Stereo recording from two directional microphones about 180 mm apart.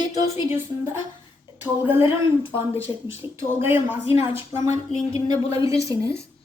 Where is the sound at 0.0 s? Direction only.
15° right (ahead or behind).